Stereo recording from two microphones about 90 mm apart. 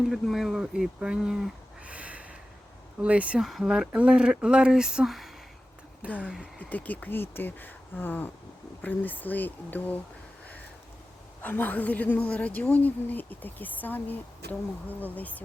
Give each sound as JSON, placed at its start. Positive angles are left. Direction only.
{"t": 0.1, "sound": "speech", "side_deg": 0}
{"t": 3.4, "sound": "speech", "side_deg": -5}
{"t": 6.0, "sound": "speech", "side_deg": -15}
{"t": 6.4, "sound": "a woman's voice", "side_deg": 20}
{"t": 11.4, "sound": "a woman's voice", "side_deg": 20}